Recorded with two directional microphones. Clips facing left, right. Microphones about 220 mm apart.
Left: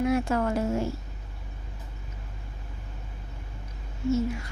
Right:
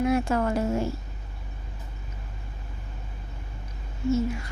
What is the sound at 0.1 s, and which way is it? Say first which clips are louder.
Speech: right 1 dB; 30° right (ahead or behind).